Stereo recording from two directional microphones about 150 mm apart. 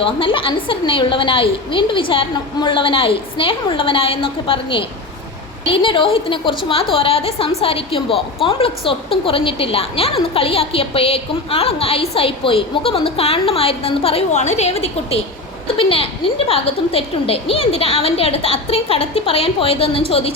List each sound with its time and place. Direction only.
0.0 s a woman's voice: 35° left (ahead or behind)